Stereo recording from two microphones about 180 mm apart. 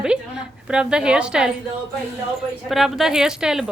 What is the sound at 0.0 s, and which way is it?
A woman's voice, 5° right (ahead or behind).